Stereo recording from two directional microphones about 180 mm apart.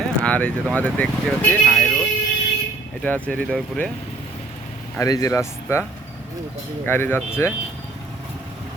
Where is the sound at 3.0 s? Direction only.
5° left (ahead or behind).